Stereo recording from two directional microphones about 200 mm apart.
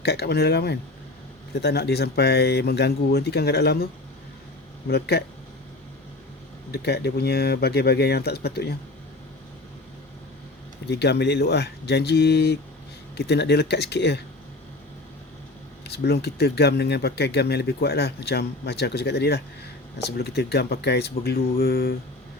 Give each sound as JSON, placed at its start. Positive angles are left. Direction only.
{"t": 0.0, "sound": "speech", "side_deg": 55}
{"t": 4.9, "sound": "speech", "side_deg": 55}
{"t": 6.7, "sound": "speech", "side_deg": 55}
{"t": 10.8, "sound": "speech", "side_deg": 55}
{"t": 15.8, "sound": "speech", "side_deg": 55}